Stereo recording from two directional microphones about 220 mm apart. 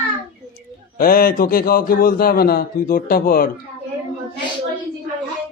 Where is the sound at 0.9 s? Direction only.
40° left (ahead or behind).